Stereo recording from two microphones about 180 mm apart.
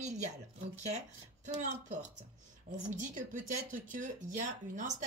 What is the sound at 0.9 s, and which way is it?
Speech, 40° right (ahead or behind).